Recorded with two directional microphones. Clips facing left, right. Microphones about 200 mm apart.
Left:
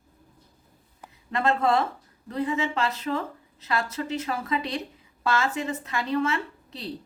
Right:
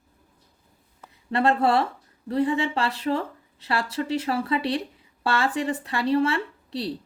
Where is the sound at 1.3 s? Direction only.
30° right (ahead or behind).